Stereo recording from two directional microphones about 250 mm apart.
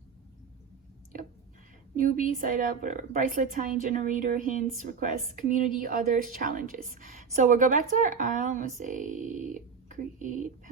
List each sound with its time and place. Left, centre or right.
2.0 s a woman's voice: right